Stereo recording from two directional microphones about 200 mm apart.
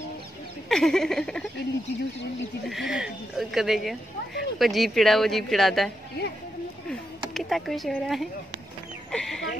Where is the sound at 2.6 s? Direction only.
Centre (ahead or behind).